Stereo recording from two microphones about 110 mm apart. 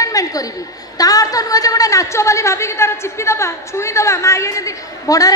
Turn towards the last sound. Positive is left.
turn(degrees=30)  # may be behind; listen again after turning